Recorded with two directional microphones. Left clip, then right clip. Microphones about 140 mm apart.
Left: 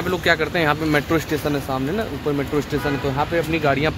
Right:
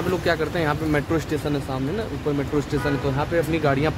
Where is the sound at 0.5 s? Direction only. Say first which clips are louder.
Left 4 dB; 25° left (ahead or behind).